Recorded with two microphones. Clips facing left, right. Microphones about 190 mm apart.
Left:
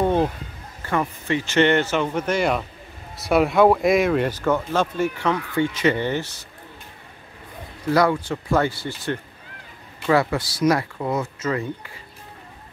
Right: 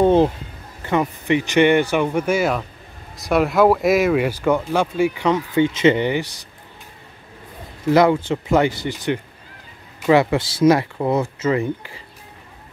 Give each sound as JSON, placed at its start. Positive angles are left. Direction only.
{"t": 0.0, "sound": "speech", "side_deg": -30}
{"t": 0.8, "sound": "speech", "side_deg": -20}
{"t": 7.9, "sound": "speech", "side_deg": -25}